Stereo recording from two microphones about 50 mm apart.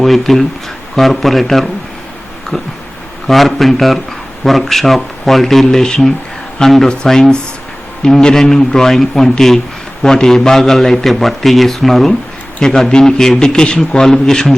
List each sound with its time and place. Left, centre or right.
0.0 s a man's voice: centre
3.2 s a man's voice: centre
5.6 s a man's voice: centre
6.8 s a man's voice: centre